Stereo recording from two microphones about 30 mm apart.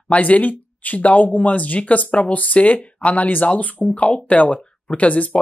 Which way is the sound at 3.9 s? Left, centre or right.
Left.